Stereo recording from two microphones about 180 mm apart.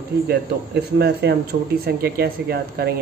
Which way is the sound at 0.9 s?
65° right (ahead or behind).